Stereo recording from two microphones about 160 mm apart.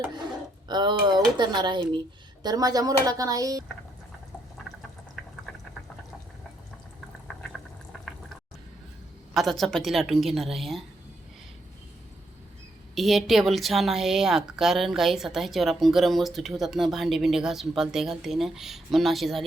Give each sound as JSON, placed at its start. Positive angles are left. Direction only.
{"t": 0.7, "sound": "speech", "side_deg": -30}
{"t": 4.5, "sound": "a sound", "side_deg": 0}
{"t": 7.3, "sound": "boiling", "side_deg": 5}
{"t": 9.3, "sound": "a woman's voice", "side_deg": 0}
{"t": 12.9, "sound": "a woman's voice", "side_deg": 0}